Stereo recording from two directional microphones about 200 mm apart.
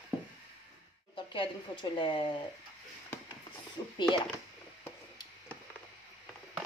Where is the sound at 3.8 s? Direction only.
20° left (ahead or behind).